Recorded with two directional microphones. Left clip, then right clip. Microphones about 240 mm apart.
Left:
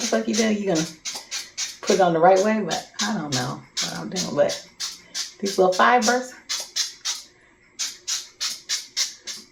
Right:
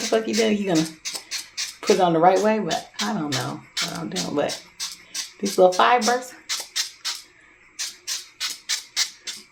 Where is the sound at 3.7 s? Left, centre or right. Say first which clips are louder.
Right 1 dB; right.